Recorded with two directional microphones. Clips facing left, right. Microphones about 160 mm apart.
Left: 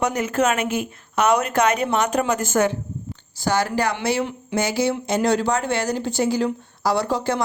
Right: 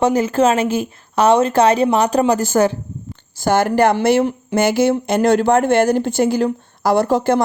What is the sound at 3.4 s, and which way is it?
Speech, 55° right (ahead or behind).